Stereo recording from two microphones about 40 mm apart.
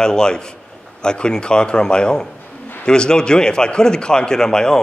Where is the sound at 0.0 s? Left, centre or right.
Centre.